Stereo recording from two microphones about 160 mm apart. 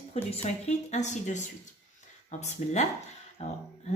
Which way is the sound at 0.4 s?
45° left (ahead or behind).